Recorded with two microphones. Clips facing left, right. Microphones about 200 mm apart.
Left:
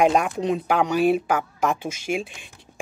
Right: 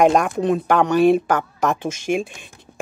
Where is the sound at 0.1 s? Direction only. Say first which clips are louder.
Right 4 dB; 45° right (ahead or behind).